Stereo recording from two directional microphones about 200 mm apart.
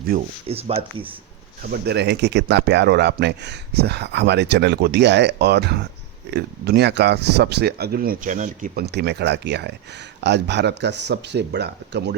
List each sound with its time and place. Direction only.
0.5 s speech: 30° right (ahead or behind)
1.7 s speech: 55° right (ahead or behind)